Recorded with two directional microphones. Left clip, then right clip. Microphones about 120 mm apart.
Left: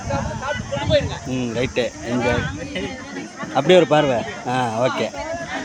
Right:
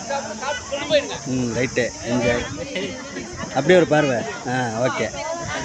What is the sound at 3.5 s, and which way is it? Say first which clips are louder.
Speech: left 2 dB; 5° left (ahead or behind).